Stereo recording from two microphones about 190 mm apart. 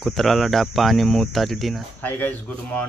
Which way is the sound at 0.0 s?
Centre (ahead or behind).